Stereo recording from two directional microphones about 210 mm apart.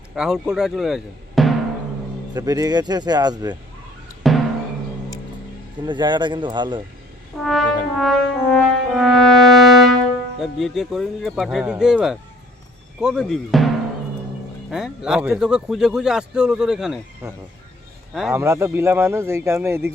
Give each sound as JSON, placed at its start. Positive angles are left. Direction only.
{"t": 0.2, "sound": "speech", "side_deg": -5}
{"t": 2.3, "sound": "speech", "side_deg": -15}
{"t": 4.2, "sound": "music", "side_deg": 0}
{"t": 5.8, "sound": "speech", "side_deg": -20}
{"t": 7.4, "sound": "speech", "side_deg": 0}
{"t": 7.9, "sound": "brass instrument", "side_deg": 0}
{"t": 10.4, "sound": "speech", "side_deg": 0}
{"t": 14.7, "sound": "speech", "side_deg": 0}
{"t": 17.2, "sound": "speech", "side_deg": -15}